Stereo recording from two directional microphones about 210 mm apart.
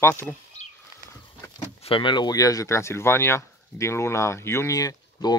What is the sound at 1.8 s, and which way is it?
Speech, 25° left (ahead or behind).